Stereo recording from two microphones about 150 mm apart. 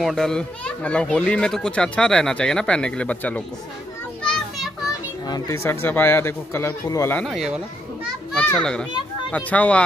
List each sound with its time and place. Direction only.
0.0 s a child's voice: 5° left (ahead or behind)
4.2 s children playing: 5° left (ahead or behind)
5.2 s a child's voice: 25° left (ahead or behind)
7.2 s speech: centre (ahead or behind)
8.3 s children playing: 5° left (ahead or behind)
9.3 s a child's voice: 10° left (ahead or behind)